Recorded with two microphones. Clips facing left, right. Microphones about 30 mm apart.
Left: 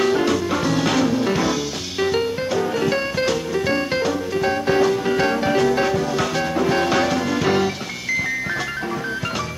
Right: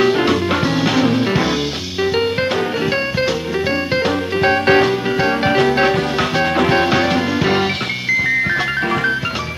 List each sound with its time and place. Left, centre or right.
0.0 s music: right
2.9 s music: right
4.0 s music: right
5.1 s music: centre
5.4 s music: right
6.7 s music: right